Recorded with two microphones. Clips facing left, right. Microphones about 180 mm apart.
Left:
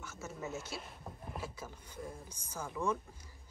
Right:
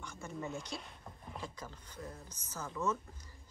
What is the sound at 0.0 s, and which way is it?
Speech, 5° left (ahead or behind).